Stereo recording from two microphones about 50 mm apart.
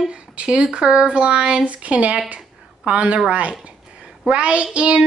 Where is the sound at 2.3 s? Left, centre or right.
Right.